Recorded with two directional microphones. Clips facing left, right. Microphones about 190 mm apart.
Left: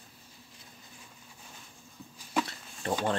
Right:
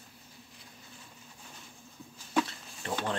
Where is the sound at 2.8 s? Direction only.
40° left (ahead or behind).